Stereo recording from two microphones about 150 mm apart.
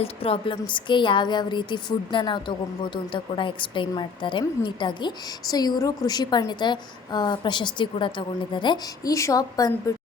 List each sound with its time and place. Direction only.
0.0 s speech: 40° left (ahead or behind); by 9.9 s 25° left (ahead or behind)